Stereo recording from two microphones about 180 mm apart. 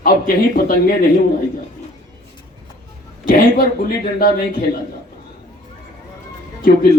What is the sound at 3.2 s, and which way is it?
A man's voice, 55° left (ahead or behind).